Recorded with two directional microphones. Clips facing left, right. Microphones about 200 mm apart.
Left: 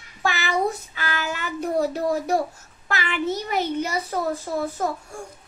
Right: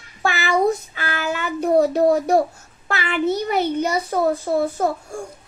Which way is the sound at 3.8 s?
40° right (ahead or behind).